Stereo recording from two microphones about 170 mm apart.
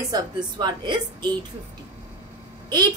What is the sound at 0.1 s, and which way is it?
A woman's voice, 25° right (ahead or behind).